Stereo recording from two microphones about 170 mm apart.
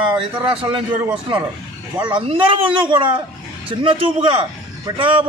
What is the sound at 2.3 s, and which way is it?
A man's voice, 30° right (ahead or behind).